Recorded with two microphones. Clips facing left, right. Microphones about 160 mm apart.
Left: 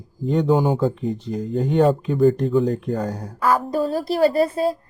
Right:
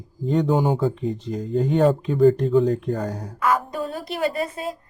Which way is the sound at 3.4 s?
35° left (ahead or behind).